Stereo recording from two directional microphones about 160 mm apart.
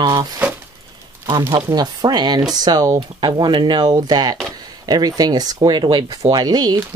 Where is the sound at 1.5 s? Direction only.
25° right (ahead or behind).